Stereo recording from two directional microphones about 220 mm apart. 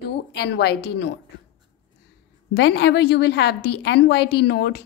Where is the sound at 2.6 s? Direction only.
50° left (ahead or behind).